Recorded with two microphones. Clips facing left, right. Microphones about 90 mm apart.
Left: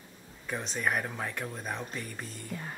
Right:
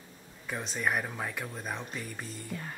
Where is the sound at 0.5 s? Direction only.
Centre (ahead or behind).